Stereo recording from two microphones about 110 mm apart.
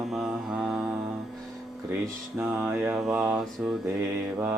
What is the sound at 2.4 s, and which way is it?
Mantra, 15° right (ahead or behind).